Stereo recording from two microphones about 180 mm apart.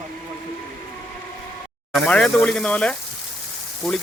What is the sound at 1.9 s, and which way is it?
Speech, 5° left (ahead or behind).